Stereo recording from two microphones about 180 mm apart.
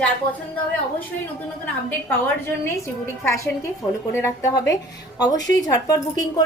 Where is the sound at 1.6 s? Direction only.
10° left (ahead or behind).